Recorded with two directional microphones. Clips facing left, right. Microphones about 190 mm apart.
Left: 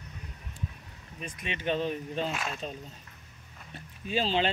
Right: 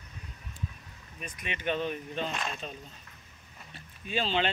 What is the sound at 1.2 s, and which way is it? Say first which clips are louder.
Speech: left 1 dB; 25° left (ahead or behind).